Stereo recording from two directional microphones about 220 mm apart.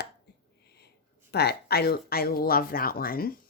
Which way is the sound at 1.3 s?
45° left (ahead or behind).